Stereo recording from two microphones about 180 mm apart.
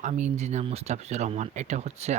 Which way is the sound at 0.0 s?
40° right (ahead or behind).